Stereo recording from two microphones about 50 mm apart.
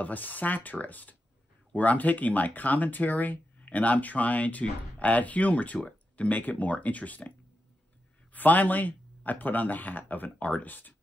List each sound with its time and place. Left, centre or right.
0.0 s speech: left